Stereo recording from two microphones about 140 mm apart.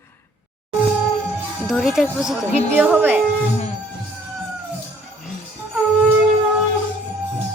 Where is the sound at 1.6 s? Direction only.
Centre (ahead or behind).